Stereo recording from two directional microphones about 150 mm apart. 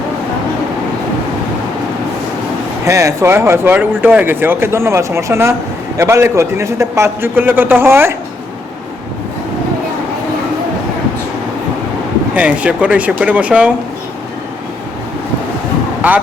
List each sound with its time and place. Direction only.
2.8 s speech: 20° right (ahead or behind)
12.3 s speech: 10° right (ahead or behind)
16.0 s a sound: 10° right (ahead or behind)